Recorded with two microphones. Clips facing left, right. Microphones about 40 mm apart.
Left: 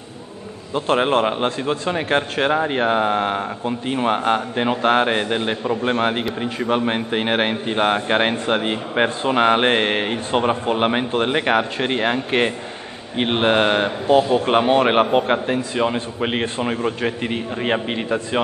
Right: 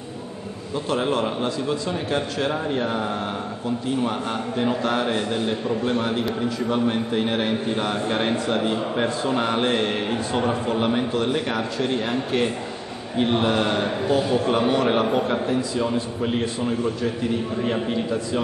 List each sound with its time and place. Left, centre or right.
0.7 s a man's voice: left